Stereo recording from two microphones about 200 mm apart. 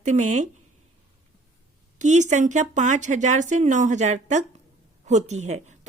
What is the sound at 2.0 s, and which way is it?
Speech, 35° right (ahead or behind).